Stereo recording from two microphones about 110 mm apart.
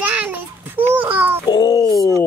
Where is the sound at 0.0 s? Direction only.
15° right (ahead or behind).